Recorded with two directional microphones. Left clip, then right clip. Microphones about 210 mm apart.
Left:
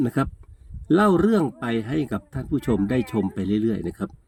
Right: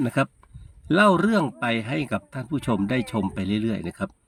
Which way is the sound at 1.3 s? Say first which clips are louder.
Even; 10° right (ahead or behind).